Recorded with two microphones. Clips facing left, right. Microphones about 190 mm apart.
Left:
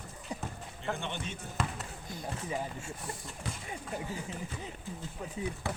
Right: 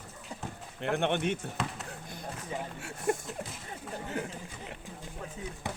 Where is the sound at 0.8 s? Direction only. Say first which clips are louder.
Right 8 dB; 65° right (ahead or behind).